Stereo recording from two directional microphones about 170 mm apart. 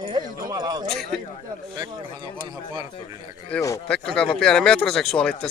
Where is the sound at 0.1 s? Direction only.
20° right (ahead or behind).